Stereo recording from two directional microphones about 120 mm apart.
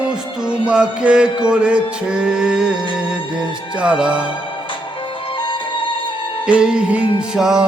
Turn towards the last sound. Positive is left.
turn(degrees=-5)  # may be behind; listen again after turning